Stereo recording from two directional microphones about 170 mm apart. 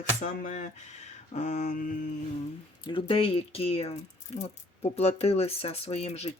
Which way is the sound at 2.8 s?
30° left (ahead or behind).